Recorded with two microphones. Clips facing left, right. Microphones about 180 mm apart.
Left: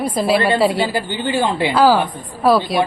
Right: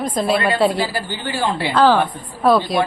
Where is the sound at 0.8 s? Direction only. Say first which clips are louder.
Left 4 dB; 20° left (ahead or behind); by 2.8 s 5° left (ahead or behind).